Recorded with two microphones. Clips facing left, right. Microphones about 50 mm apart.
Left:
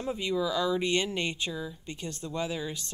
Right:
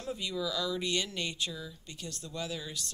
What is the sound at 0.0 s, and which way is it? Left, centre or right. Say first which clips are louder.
Speech: left 6 dB; left.